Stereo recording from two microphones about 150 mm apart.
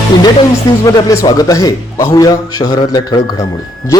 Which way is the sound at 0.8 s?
25° left (ahead or behind).